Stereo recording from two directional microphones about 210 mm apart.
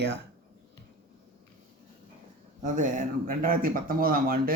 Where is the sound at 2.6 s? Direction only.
35° right (ahead or behind).